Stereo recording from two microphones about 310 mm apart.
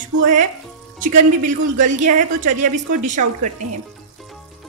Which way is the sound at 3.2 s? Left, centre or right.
Right.